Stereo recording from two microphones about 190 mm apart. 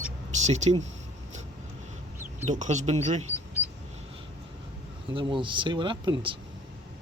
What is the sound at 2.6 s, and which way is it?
Speech, 40° right (ahead or behind).